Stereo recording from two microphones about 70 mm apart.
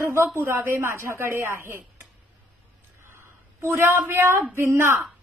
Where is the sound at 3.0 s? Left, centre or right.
Right.